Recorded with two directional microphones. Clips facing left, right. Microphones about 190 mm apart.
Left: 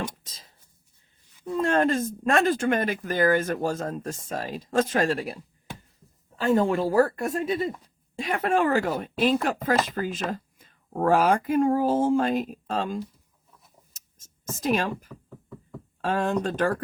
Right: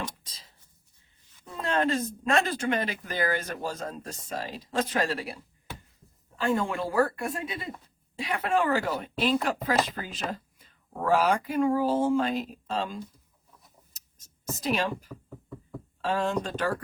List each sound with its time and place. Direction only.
1.6 s speech: 50° left (ahead or behind)
14.5 s speech: 50° left (ahead or behind)
15.1 s speech: 5° right (ahead or behind)
16.0 s speech: 50° left (ahead or behind)